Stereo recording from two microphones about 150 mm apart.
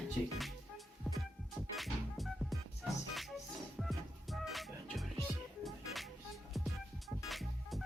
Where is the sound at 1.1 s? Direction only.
Centre (ahead or behind).